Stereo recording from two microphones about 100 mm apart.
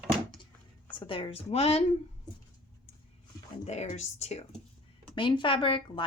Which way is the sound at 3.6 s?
90° left.